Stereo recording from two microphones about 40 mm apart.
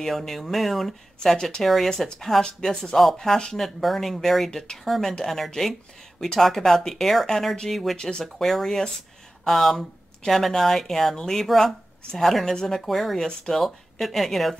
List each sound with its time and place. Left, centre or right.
0.0 s speech: centre
1.2 s speech: centre
1.6 s speech: centre
3.5 s speech: centre
4.5 s speech: centre
4.8 s speech: centre
8.0 s speech: centre
8.3 s speech: centre